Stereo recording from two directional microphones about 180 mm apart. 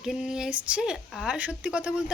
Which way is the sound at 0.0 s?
5° right (ahead or behind).